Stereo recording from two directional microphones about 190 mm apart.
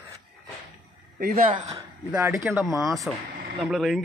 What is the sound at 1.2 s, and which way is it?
Speech, 50° right (ahead or behind).